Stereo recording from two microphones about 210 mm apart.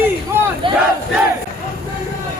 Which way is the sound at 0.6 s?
25° right (ahead or behind).